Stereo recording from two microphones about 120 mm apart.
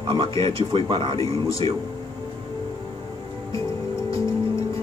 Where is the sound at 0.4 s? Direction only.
45° right (ahead or behind).